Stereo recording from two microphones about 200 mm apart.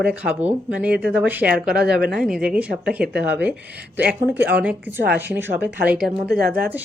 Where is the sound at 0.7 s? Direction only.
5° right (ahead or behind).